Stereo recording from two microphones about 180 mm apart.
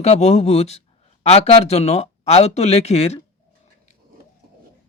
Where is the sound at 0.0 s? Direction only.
35° left (ahead or behind).